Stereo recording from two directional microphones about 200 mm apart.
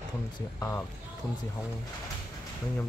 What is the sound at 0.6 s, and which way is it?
Speech, 10° left (ahead or behind).